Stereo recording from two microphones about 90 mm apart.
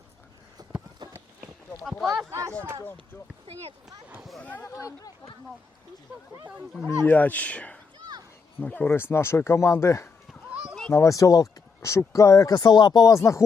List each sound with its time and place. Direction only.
1.8 s speech: centre (ahead or behind)
4.2 s speech: centre (ahead or behind)
4.4 s speech: 20° left (ahead or behind)
4.7 s speech: 40° left (ahead or behind)
7.0 s speech: 20° left (ahead or behind)
8.9 s speech: 30° left (ahead or behind); by 13.1 s 50° left (ahead or behind)
13.1 s speech: 35° left (ahead or behind)